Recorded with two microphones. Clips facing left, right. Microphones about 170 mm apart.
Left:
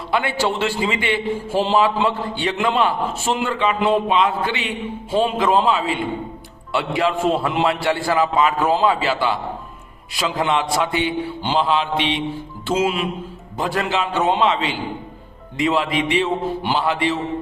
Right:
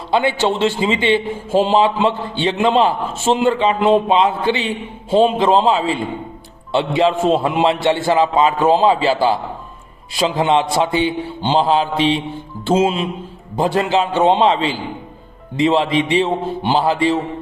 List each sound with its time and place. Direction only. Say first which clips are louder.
0.1 s a man's voice: right 4 dB; 25° right (ahead or behind)